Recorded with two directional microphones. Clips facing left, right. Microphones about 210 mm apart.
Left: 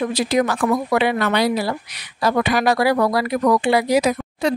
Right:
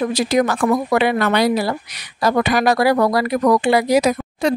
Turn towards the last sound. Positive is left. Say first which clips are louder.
# right 2 dB
turn(degrees=-45)  # may be behind; listen again after turning